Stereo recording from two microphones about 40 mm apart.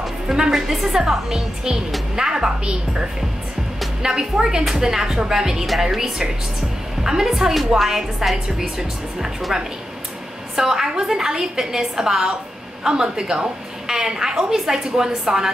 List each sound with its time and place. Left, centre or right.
0.5 s a woman's voice: centre
4.0 s a woman's voice: centre
7.0 s a sound: centre
7.2 s a woman's voice: centre